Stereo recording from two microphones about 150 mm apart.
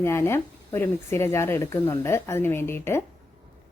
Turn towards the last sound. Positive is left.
turn(degrees=15)  # may be behind; listen again after turning